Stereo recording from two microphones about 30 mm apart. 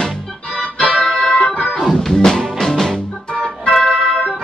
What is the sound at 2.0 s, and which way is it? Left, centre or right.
Music, centre.